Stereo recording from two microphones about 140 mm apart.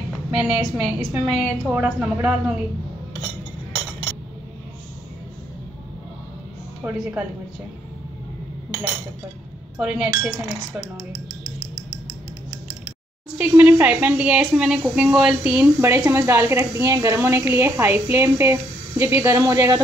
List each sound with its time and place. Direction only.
0.4 s a woman's voice: 5° right (ahead or behind)
6.8 s a woman's voice: 10° right (ahead or behind)
9.8 s a woman's voice: 5° right (ahead or behind)
13.4 s a woman's voice: 15° right (ahead or behind)